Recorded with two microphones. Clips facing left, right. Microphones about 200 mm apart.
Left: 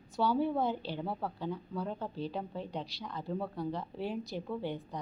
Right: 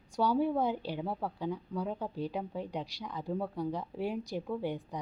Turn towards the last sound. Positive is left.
turn(degrees=-15)  # may be behind; listen again after turning